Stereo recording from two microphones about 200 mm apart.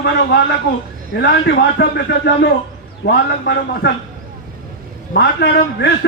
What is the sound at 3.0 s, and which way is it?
Speech, 60° left (ahead or behind).